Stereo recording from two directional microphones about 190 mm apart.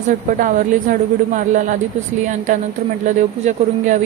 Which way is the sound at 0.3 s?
45° right (ahead or behind).